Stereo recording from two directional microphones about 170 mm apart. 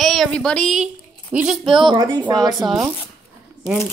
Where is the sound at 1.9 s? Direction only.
25° right (ahead or behind).